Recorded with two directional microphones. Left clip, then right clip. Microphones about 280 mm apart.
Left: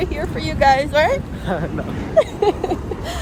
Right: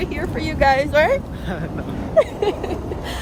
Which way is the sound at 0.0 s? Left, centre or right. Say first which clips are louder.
Left 1 dB; centre.